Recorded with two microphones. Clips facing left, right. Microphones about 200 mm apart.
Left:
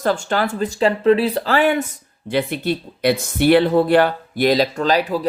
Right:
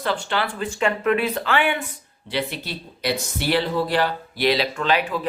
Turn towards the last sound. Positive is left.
turn(degrees=40)  # may be behind; listen again after turning